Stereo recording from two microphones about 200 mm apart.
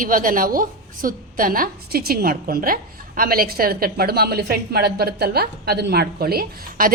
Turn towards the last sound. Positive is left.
turn(degrees=-50)  # may be behind; listen again after turning